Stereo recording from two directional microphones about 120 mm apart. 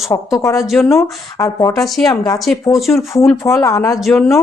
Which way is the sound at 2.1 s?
30° left (ahead or behind).